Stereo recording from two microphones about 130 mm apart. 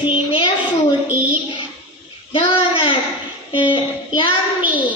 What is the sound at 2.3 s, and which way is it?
Child singing, 40° left (ahead or behind).